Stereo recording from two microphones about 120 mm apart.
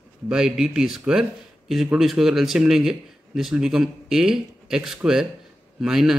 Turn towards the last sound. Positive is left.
turn(degrees=-5)  # may be behind; listen again after turning